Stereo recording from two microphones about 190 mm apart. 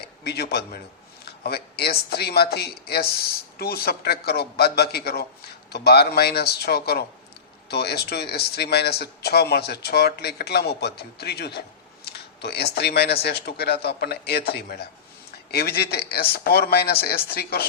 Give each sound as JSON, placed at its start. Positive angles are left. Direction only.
{"t": 0.0, "sound": "a man's voice", "side_deg": 60}